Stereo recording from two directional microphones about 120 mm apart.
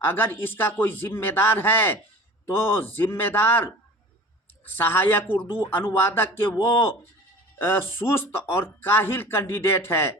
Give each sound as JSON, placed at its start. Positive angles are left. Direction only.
{"t": 0.0, "sound": "speech", "side_deg": 15}